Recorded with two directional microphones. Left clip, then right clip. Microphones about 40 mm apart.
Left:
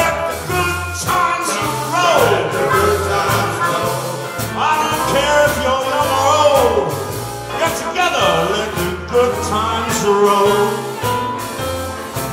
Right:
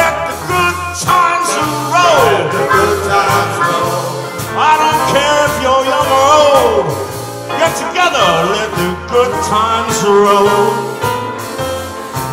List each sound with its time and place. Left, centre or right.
0.5 s music: right
7.5 s music: right